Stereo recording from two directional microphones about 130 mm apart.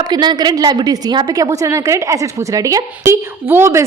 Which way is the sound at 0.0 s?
35° right (ahead or behind).